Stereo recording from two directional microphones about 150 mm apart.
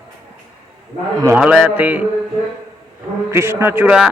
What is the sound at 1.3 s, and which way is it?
Speech, 5° right (ahead or behind).